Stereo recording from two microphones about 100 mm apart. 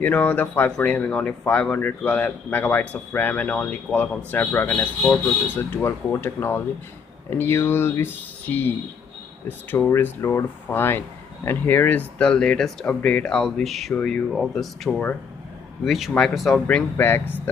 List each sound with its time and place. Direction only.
0.0 s speech: 15° left (ahead or behind); by 16.6 s centre (ahead or behind)
16.9 s speech: 20° left (ahead or behind)